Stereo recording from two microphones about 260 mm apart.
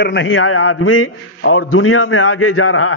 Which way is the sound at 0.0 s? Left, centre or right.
Left.